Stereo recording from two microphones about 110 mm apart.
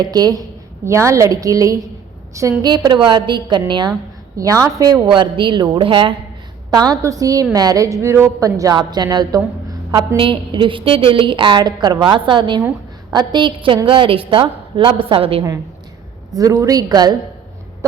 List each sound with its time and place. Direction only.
0.0 s speech: 35° right (ahead or behind)
0.9 s a woman's voice: 25° right (ahead or behind); by 3.9 s 45° right (ahead or behind)
4.4 s speech: 25° right (ahead or behind)
4.9 s a woman's voice: 45° right (ahead or behind)
6.7 s speech: 35° right (ahead or behind)
10.2 s a woman's voice: 50° right (ahead or behind)
16.3 s speech: 30° right (ahead or behind)